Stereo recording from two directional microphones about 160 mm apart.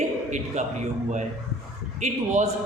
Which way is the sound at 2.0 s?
45° right (ahead or behind).